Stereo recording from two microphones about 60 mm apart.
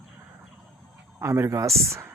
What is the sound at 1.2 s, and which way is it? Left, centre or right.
Speech, right.